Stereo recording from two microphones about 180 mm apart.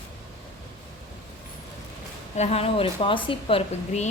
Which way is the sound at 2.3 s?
35° left (ahead or behind).